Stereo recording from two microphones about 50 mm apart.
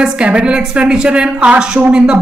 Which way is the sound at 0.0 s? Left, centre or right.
Right.